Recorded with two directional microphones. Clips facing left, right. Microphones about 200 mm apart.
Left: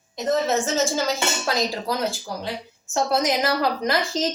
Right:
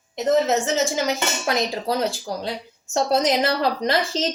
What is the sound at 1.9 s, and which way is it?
A woman's voice, 30° right (ahead or behind).